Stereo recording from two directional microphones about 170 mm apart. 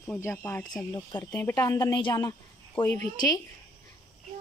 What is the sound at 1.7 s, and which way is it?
A woman's voice, 25° left (ahead or behind).